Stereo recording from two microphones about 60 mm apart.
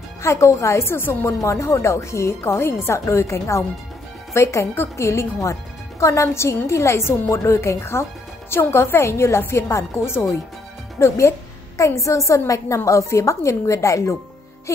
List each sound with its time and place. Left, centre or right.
0.2 s a woman's voice: left
1.4 s a woman's voice: left